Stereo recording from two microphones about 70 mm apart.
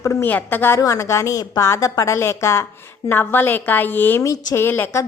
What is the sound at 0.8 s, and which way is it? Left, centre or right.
A woman's voice, left.